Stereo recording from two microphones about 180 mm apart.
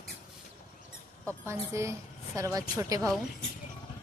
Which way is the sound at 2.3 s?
15° right (ahead or behind).